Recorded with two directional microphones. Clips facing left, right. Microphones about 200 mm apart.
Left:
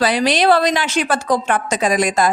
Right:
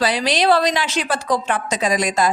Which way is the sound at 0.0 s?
50° left (ahead or behind).